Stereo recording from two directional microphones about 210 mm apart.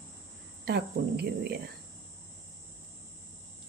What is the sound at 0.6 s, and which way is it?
Speech, 50° right (ahead or behind).